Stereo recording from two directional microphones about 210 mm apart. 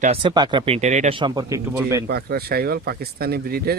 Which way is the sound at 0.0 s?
25° right (ahead or behind).